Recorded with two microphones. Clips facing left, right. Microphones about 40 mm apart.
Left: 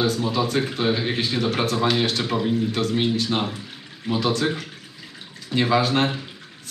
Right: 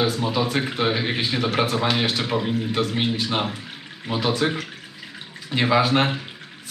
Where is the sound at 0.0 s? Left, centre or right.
Centre.